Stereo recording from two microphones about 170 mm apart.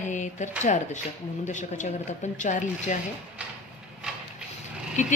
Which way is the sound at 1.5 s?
45° left (ahead or behind).